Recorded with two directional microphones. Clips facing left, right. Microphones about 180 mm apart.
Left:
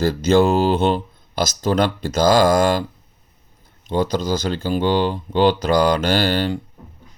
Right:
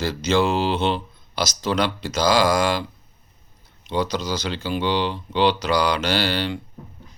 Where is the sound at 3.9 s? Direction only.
50° left (ahead or behind).